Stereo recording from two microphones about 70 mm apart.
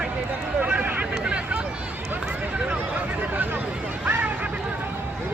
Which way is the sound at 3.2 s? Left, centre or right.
Right.